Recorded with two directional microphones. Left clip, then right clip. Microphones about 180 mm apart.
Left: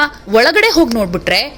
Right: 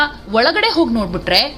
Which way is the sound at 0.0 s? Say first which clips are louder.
Left 3 dB; 25° left (ahead or behind).